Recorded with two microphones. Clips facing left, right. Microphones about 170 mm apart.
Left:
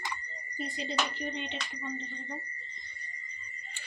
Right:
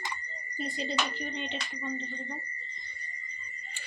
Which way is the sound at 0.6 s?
15° left (ahead or behind).